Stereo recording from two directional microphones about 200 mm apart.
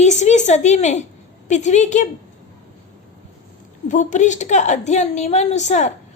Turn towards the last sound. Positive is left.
turn(degrees=35)  # may be behind; listen again after turning